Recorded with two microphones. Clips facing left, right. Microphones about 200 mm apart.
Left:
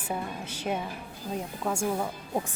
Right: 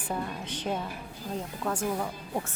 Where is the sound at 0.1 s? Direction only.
10° left (ahead or behind).